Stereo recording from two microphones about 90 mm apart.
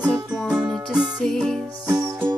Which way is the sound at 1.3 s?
5° left (ahead or behind).